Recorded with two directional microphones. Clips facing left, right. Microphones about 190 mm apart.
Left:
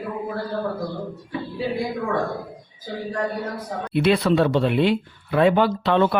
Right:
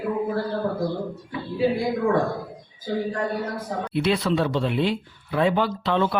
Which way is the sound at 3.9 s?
60° left (ahead or behind).